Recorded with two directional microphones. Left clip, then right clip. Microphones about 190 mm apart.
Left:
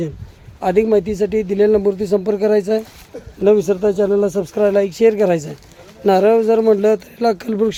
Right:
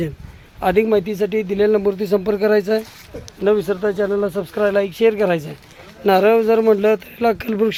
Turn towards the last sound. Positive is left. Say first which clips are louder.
# left 1 dB
turn(degrees=15)  # may be behind; listen again after turning